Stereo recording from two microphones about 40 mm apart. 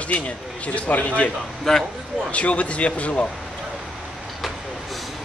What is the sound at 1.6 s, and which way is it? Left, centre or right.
Speech, centre.